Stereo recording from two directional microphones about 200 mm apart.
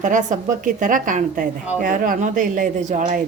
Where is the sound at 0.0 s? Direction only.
40° right (ahead or behind).